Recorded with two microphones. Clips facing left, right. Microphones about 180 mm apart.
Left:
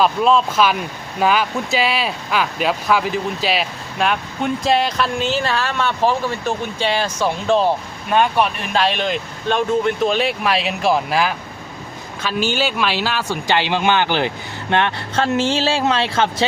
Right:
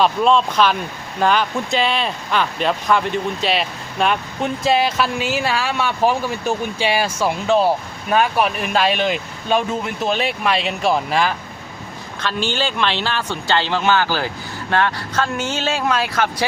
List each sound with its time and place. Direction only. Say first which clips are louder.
0.0 s speech: even; centre (ahead or behind); by 16.5 s 25° left (ahead or behind)